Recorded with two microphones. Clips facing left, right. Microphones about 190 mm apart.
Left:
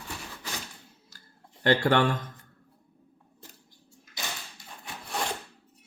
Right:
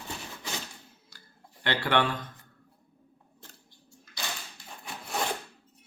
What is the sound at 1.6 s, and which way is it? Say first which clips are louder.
Speech: left 4 dB; 45° left (ahead or behind).